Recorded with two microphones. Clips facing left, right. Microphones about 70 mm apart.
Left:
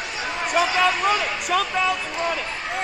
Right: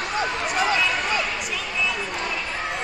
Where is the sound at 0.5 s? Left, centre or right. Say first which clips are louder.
Left 3 dB; right.